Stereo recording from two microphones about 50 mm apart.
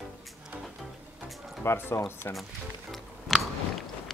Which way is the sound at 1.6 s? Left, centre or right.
Left.